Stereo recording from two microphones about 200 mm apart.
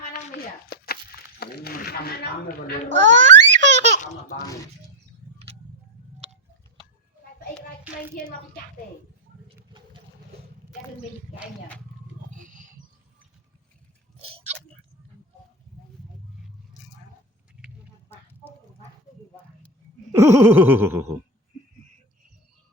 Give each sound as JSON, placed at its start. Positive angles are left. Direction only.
{"t": 0.0, "sound": "a sound", "side_deg": 50}
{"t": 1.4, "sound": "speech", "side_deg": 50}
{"t": 2.9, "sound": "baby laughter", "side_deg": -65}
{"t": 9.7, "sound": "vehicle", "side_deg": -25}
{"t": 14.2, "sound": "biting", "side_deg": -30}
{"t": 20.1, "sound": "a sound", "side_deg": -10}